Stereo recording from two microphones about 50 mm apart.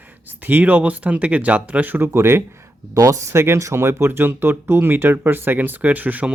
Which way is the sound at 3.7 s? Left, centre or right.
Right.